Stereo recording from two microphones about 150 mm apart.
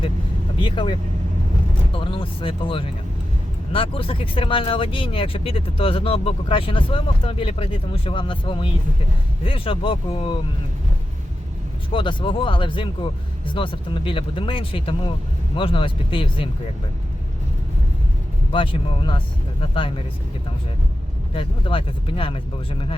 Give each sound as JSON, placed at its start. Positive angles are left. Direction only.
{"t": 0.6, "sound": "speech", "side_deg": 35}
{"t": 2.0, "sound": "speech", "side_deg": 35}
{"t": 11.9, "sound": "speech", "side_deg": 35}
{"t": 18.5, "sound": "speech", "side_deg": 35}
{"t": 21.3, "sound": "speech", "side_deg": 35}